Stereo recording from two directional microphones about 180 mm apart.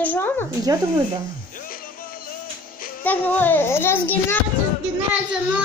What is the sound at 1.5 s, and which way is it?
Music, 50° left (ahead or behind).